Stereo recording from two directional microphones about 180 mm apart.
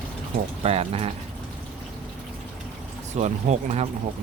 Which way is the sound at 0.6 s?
35° right (ahead or behind).